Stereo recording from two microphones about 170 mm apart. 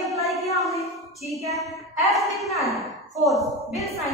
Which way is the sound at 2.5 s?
20° right (ahead or behind).